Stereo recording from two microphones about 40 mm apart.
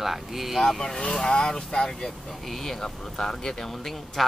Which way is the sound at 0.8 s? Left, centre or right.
Centre.